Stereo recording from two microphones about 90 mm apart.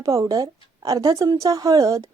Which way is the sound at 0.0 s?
35° right (ahead or behind).